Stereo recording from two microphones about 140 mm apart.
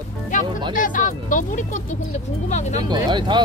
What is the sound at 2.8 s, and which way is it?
Speech, 30° right (ahead or behind).